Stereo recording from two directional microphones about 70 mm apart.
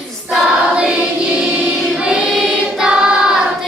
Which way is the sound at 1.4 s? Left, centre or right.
Centre.